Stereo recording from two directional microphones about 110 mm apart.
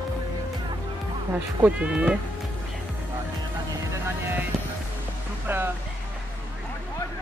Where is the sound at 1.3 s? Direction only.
15° right (ahead or behind).